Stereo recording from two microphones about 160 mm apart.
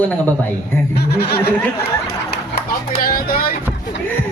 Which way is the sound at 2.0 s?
75° left (ahead or behind).